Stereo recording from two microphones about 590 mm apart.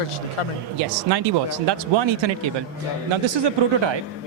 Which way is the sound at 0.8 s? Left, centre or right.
Right.